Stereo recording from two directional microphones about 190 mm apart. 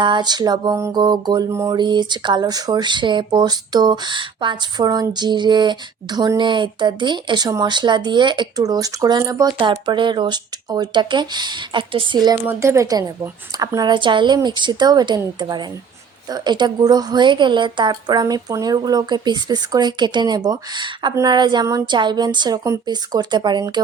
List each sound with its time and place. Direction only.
0.0 s music: 25° right (ahead or behind)
12.5 s speech: 15° right (ahead or behind)
13.6 s music: 20° right (ahead or behind)